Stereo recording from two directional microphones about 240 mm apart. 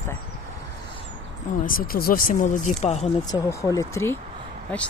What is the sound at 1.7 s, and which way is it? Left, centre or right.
Speech, left.